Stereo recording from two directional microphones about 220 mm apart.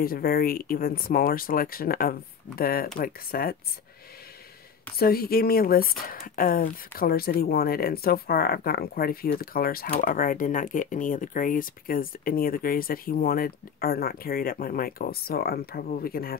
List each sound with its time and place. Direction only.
0.0 s speech: 45° left (ahead or behind)
4.9 s speech: 45° left (ahead or behind)